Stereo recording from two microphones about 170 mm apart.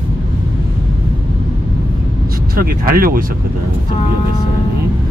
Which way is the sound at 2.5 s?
60° right (ahead or behind).